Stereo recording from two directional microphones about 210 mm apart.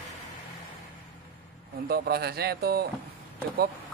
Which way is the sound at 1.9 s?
50° right (ahead or behind).